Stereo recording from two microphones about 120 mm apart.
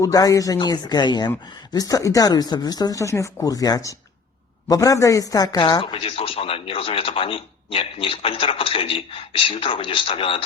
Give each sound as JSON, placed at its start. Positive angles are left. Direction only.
{"t": 0.0, "sound": "speech", "side_deg": 30}